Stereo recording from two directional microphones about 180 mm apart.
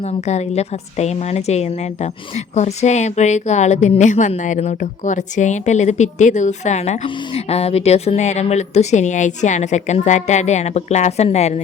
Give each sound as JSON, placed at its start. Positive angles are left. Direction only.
{"t": 0.0, "sound": "a woman's voice", "side_deg": 40}